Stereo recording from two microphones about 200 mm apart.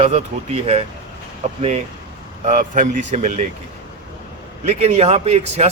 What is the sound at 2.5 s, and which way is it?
Speech, 40° right (ahead or behind).